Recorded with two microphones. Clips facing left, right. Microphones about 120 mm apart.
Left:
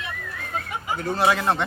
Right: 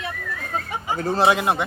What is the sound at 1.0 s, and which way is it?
Speech, 35° right (ahead or behind).